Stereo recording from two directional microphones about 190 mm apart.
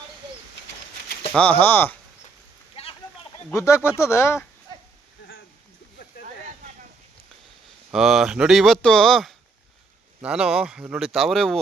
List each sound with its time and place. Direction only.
1.4 s speech: 10° left (ahead or behind)
3.5 s speech: 15° left (ahead or behind)
7.9 s speech: centre (ahead or behind)